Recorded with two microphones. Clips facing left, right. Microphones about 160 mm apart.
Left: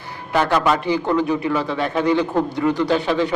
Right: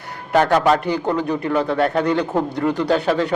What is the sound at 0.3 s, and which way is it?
A man's voice, 45° right (ahead or behind).